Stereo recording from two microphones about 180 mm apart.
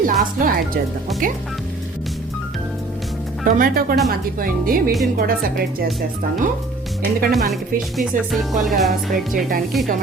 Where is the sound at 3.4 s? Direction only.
55° right (ahead or behind).